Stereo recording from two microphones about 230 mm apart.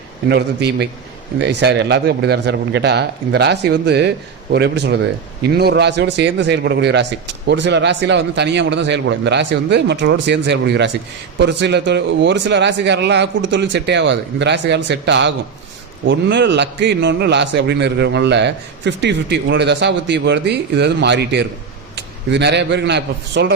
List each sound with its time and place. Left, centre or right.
0.3 s a man's voice: right